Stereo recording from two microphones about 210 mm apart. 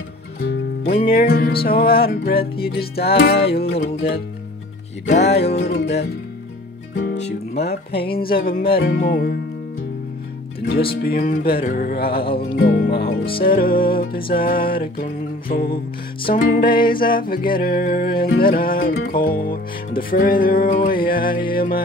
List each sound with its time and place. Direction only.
1.0 s music: 45° left (ahead or behind)
5.2 s music: 50° left (ahead or behind)
7.2 s music: 50° left (ahead or behind)
11.0 s music: 45° left (ahead or behind)